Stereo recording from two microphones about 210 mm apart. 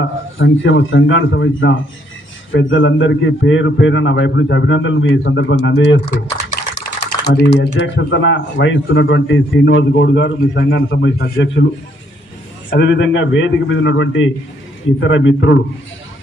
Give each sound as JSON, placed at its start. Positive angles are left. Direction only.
{"t": 0.0, "sound": "a man's voice", "side_deg": 65}
{"t": 7.0, "sound": "typing", "side_deg": 55}
{"t": 7.6, "sound": "a man's voice", "side_deg": 60}
{"t": 12.7, "sound": "a man's voice", "side_deg": 55}